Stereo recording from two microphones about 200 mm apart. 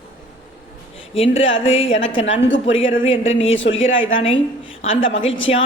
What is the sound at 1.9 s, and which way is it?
A woman's voice, 75° left (ahead or behind).